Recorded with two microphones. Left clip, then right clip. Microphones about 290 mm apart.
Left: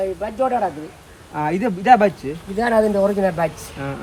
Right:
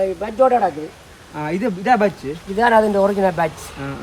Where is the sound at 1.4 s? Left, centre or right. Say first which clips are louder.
Left 1 dB; centre.